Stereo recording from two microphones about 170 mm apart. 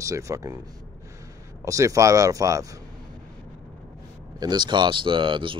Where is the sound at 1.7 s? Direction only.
20° right (ahead or behind).